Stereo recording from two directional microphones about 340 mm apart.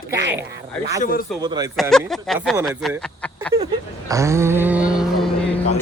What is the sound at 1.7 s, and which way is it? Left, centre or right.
Speech, centre.